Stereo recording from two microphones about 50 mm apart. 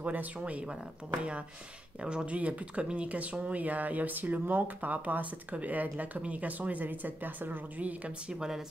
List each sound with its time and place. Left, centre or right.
0.0 s speech: right
2.0 s speech: right
8.3 s a woman's voice: centre